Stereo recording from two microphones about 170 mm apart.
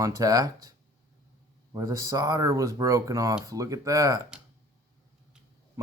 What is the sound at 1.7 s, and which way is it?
Speech, 20° right (ahead or behind).